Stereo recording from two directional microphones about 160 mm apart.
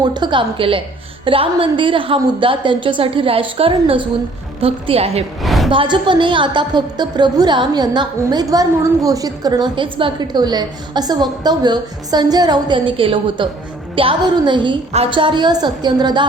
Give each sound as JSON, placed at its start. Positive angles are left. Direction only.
{"t": 0.0, "sound": "a woman's voice", "side_deg": -25}
{"t": 5.4, "sound": "a sound", "side_deg": 0}
{"t": 5.7, "sound": "a woman's voice", "side_deg": -30}